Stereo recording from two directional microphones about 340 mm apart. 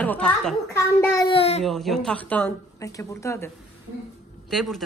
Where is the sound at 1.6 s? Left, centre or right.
Centre.